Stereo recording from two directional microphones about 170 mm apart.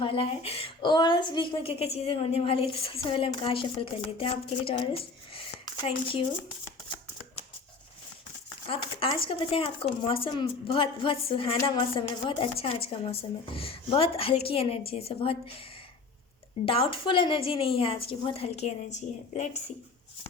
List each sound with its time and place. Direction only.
0.0 s speech: 30° left (ahead or behind)
8.6 s speech: 30° left (ahead or behind)
16.6 s speech: 30° left (ahead or behind)